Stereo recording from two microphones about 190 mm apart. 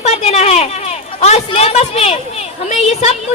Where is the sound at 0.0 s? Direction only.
35° left (ahead or behind).